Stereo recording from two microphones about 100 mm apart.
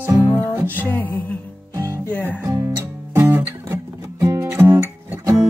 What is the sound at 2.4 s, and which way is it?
Music, 30° right (ahead or behind).